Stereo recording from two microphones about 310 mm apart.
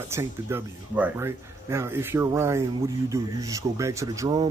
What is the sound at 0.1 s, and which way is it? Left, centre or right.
Speech, centre.